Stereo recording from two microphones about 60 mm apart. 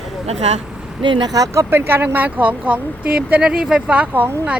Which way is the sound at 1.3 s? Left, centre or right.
Right.